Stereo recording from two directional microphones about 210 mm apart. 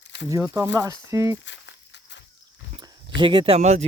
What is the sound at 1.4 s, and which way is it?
Snake, 60° left (ahead or behind).